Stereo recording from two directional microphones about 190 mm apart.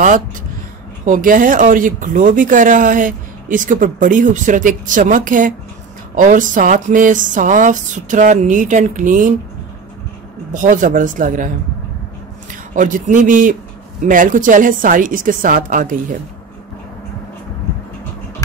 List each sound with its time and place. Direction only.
1.0 s speech: 45° right (ahead or behind)
10.5 s speech: 40° right (ahead or behind)
12.7 s speech: 45° right (ahead or behind)